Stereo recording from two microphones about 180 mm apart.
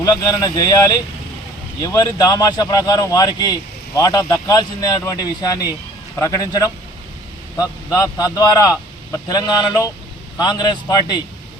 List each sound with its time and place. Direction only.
0.0 s a man's voice: 20° left (ahead or behind)
7.9 s a man's voice: 20° left (ahead or behind)